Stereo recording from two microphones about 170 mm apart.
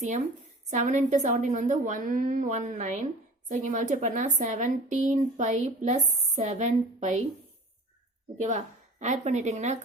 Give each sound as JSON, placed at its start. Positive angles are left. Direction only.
{"t": 0.0, "sound": "a woman's voice", "side_deg": -45}
{"t": 8.4, "sound": "a woman's voice", "side_deg": -45}